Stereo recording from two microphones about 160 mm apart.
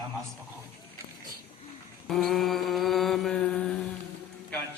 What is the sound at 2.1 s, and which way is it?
Mantra, centre (ahead or behind).